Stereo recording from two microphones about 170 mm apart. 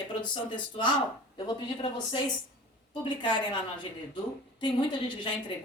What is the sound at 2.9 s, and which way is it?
Speech, 30° left (ahead or behind).